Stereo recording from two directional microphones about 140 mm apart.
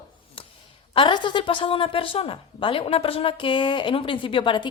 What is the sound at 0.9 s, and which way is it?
A woman's voice, 35° left (ahead or behind).